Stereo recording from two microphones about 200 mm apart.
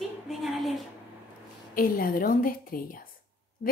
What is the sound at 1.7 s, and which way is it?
A woman's voice, 45° left (ahead or behind).